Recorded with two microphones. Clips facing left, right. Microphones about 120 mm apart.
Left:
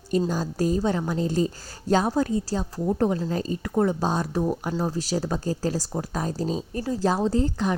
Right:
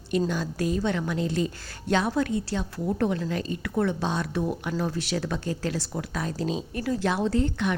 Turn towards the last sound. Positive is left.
turn(degrees=35)  # may be behind; listen again after turning